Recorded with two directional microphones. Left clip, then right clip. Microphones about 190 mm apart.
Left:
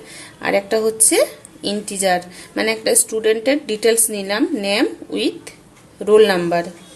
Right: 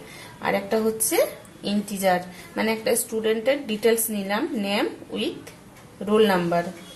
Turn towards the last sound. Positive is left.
turn(degrees=45)  # may be behind; listen again after turning